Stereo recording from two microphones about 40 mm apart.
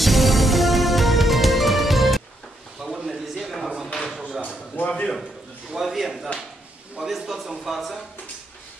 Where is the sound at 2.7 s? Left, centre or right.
Centre.